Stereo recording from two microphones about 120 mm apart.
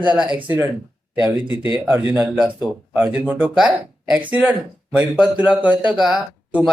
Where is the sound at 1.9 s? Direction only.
15° right (ahead or behind).